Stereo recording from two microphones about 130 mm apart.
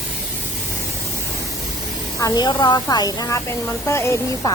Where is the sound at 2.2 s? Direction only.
35° left (ahead or behind).